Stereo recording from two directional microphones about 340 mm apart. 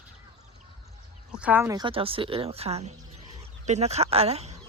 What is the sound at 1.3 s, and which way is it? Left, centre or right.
Speech, centre.